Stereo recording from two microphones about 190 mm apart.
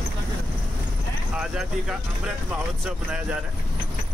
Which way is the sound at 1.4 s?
5° right (ahead or behind).